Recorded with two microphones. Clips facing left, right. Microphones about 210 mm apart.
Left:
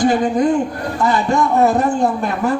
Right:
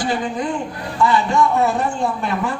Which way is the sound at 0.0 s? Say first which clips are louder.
Left 7 dB; 45° left (ahead or behind).